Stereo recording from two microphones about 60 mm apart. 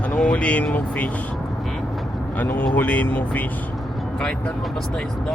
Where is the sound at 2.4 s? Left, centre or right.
Left.